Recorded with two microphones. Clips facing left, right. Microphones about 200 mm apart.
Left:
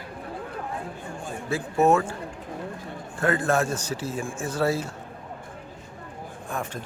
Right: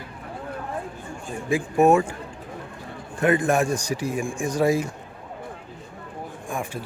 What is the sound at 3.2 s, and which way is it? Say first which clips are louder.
A man's voice: right 3 dB; 15° right (ahead or behind).